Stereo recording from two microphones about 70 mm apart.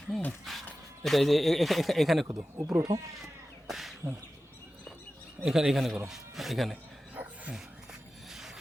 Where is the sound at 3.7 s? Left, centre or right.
Centre.